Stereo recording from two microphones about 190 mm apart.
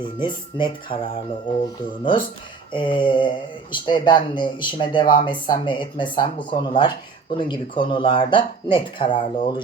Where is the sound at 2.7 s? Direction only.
25° left (ahead or behind).